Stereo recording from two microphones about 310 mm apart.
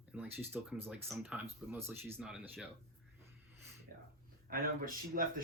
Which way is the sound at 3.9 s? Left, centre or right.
Right.